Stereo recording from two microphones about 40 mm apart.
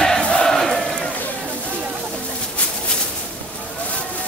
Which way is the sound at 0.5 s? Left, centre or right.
Centre.